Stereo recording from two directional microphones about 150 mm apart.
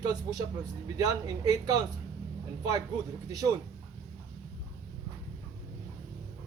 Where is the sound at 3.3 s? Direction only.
25° right (ahead or behind).